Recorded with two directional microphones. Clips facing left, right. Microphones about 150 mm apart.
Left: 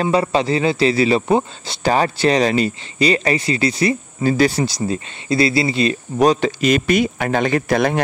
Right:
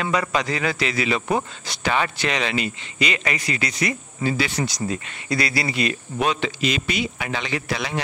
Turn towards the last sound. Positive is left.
turn(degrees=50)  # may be behind; listen again after turning